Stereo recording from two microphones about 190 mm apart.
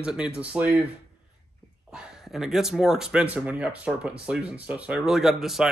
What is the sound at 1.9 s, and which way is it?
Speech, 5° right (ahead or behind).